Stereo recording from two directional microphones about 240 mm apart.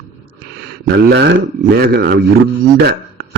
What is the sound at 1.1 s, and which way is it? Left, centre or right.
Speech, right.